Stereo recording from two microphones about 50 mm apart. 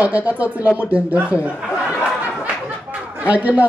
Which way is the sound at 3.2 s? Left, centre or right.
Right.